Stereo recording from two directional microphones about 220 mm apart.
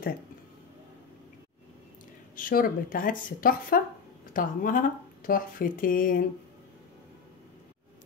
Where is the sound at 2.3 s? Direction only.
40° left (ahead or behind).